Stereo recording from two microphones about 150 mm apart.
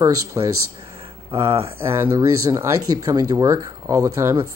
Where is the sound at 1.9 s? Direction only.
15° right (ahead or behind).